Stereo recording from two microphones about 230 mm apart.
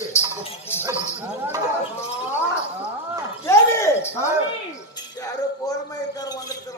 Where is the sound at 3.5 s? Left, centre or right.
Centre.